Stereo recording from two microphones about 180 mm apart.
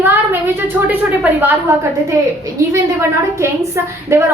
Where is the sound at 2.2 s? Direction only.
20° right (ahead or behind).